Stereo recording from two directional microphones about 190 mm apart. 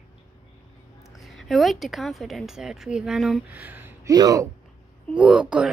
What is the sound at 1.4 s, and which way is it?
A woman's voice, centre (ahead or behind).